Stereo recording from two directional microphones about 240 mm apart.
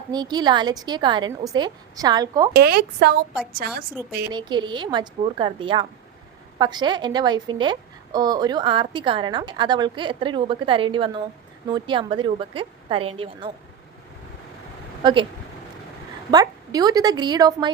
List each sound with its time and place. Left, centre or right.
0.1 s a woman's voice: centre
2.5 s a woman's voice: right
4.3 s a woman's voice: centre
15.0 s a woman's voice: right
16.3 s a woman's voice: centre